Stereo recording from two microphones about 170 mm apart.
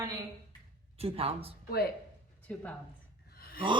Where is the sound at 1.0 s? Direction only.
35° right (ahead or behind).